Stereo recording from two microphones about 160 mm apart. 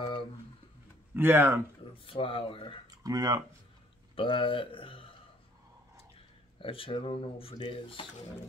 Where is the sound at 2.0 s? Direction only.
35° left (ahead or behind).